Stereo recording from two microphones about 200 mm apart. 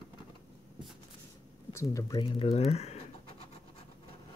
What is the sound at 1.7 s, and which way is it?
Speech, 15° left (ahead or behind).